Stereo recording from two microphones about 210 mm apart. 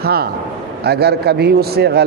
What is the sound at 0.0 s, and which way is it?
A man's voice, 45° right (ahead or behind).